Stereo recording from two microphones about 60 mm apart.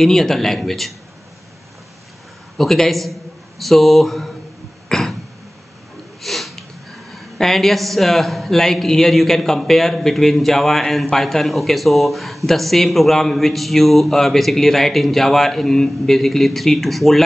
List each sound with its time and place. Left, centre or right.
0.0 s a man's voice: centre
2.5 s a man's voice: centre
4.8 s cough: centre
6.2 s sniff: centre
7.2 s a man's voice: centre